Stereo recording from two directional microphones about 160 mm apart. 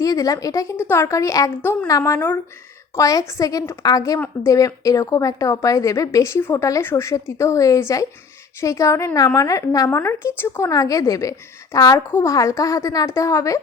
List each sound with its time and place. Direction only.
0.0 s a woman's voice: 20° left (ahead or behind)